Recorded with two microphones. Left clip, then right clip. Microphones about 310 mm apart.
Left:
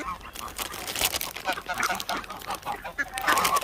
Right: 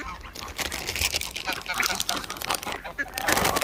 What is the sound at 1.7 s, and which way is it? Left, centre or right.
Duck, left.